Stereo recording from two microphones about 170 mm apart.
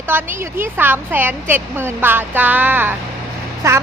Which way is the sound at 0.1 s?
10° right (ahead or behind).